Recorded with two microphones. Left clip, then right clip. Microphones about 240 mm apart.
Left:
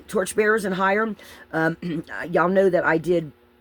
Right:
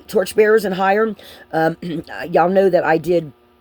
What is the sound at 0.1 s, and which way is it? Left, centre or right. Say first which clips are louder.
Speech: right 7 dB; centre.